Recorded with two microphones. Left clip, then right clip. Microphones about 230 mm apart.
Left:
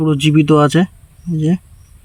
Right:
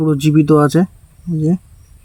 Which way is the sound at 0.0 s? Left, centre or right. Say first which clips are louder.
Even; centre.